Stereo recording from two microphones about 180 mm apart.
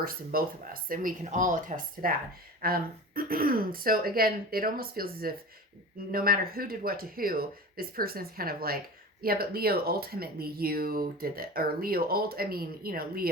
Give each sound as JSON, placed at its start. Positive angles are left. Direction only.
{"t": 0.0, "sound": "speech", "side_deg": -55}